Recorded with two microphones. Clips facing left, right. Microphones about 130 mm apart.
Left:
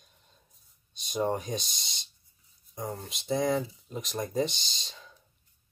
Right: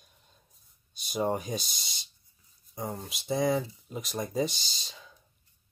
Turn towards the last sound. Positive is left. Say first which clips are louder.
# even
turn(degrees=-5)  # may be behind; listen again after turning